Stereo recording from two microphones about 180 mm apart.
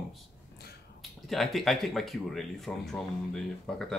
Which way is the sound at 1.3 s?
Centre (ahead or behind).